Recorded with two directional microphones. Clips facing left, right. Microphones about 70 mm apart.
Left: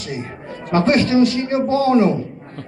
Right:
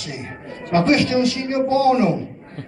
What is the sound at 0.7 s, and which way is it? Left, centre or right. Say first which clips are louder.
A man's voice: left 1 dB; left.